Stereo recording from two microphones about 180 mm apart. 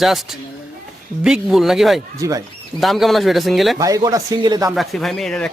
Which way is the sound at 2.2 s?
20° right (ahead or behind).